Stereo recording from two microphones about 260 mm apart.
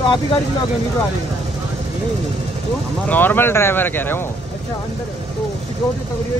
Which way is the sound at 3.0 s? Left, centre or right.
Centre.